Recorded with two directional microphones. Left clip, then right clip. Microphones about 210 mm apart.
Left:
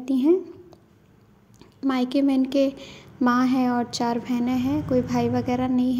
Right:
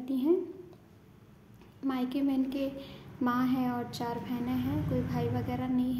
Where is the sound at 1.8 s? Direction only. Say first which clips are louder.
Left 9 dB; 35° left (ahead or behind).